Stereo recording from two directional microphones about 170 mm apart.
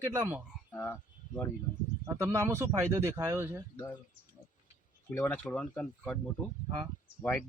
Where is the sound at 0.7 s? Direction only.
10° left (ahead or behind).